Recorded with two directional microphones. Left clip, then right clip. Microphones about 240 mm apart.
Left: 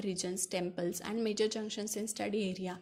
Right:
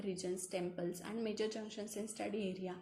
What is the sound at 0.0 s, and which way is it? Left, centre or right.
A woman's voice, left.